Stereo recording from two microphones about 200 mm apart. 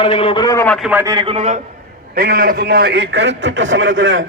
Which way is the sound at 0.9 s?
10° right (ahead or behind).